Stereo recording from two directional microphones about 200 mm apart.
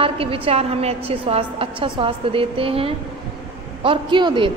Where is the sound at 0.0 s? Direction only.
30° right (ahead or behind).